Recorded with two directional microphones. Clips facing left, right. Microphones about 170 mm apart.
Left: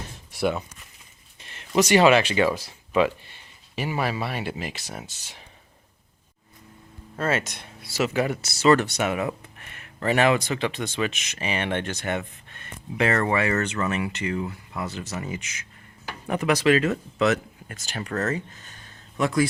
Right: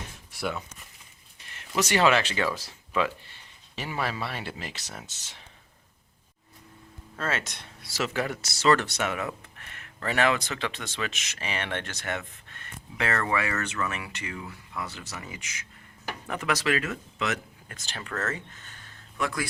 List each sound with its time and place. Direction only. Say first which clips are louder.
0.3 s speech: left 7 dB; 20° left (ahead or behind)
7.2 s speech: left 6 dB; 10° left (ahead or behind)
16.2 s speech: left 7 dB; 15° left (ahead or behind)
16.7 s speech: left 8 dB; 30° left (ahead or behind)
19.1 s speech: left 8 dB; 25° left (ahead or behind)